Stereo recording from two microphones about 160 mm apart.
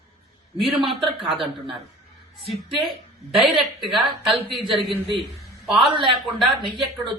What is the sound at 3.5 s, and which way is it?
A man's voice, centre (ahead or behind).